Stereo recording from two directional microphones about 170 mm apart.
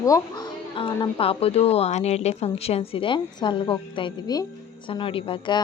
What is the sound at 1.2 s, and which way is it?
A woman's voice, 35° left (ahead or behind).